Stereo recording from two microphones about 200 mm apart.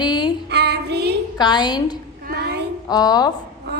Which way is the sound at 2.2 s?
50° right (ahead or behind).